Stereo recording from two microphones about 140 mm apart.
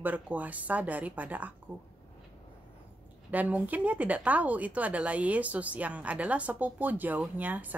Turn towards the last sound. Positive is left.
turn(degrees=-10)  # may be behind; listen again after turning